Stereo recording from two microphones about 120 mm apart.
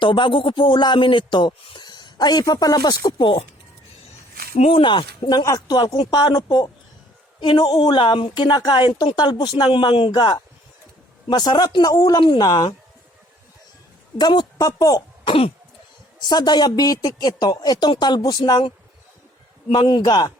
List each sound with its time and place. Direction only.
0.0 s speech: 40° left (ahead or behind)
4.5 s speech: 60° left (ahead or behind)
4.8 s speech: 40° left (ahead or behind)
9.1 s speech: 35° left (ahead or behind)
14.2 s speech: 40° left (ahead or behind)
15.3 s cough: 50° left (ahead or behind)
16.3 s speech: 35° left (ahead or behind)
19.7 s speech: 40° left (ahead or behind)